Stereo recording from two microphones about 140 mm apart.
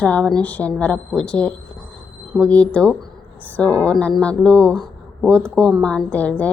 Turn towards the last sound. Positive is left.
turn(degrees=10)  # may be behind; listen again after turning